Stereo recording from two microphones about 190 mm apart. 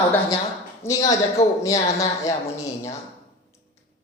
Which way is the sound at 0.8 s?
15° left (ahead or behind).